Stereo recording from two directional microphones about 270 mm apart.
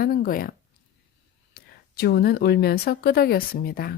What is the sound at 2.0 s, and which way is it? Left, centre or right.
Speech, left.